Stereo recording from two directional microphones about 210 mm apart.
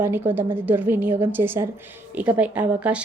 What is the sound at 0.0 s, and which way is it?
A woman's voice, 10° right (ahead or behind).